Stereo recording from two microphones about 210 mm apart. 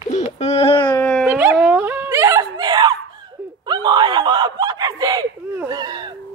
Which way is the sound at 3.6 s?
20° right (ahead or behind).